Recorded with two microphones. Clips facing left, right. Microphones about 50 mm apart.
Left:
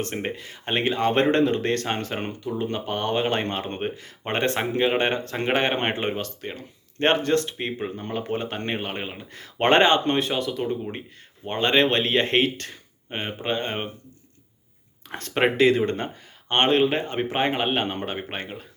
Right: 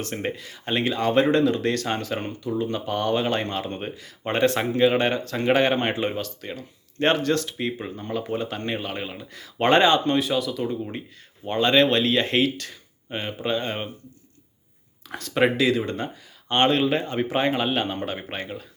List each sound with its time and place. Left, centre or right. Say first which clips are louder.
0.0 s speech: even; left
15.1 s speech: right 1 dB; left